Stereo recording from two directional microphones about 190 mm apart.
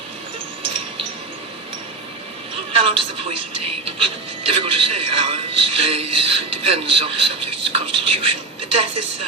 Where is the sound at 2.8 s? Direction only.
30° right (ahead or behind).